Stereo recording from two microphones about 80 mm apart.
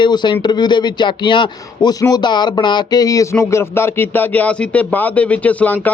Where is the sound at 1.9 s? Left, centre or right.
Left.